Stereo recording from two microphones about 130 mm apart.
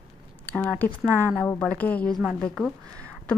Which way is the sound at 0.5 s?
10° left (ahead or behind).